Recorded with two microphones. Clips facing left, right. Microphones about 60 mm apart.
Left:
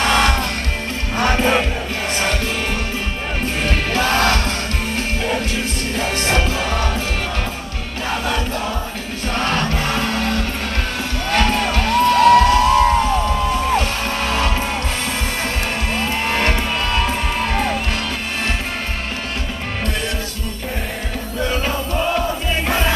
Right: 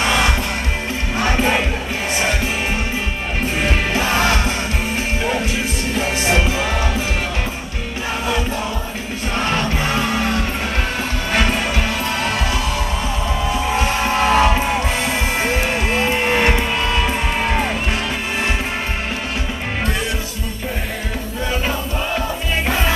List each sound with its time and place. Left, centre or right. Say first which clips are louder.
0.0 s music: left 1 dB; centre
3.6 s music: left 1 dB; centre
9.4 s music: even; centre
13.7 s music: right 3 dB; centre